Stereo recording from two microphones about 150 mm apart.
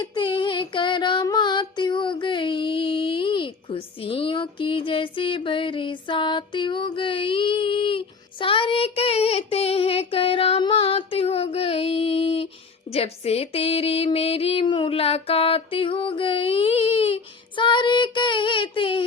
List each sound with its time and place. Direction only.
0.0 s female singing: 30° left (ahead or behind)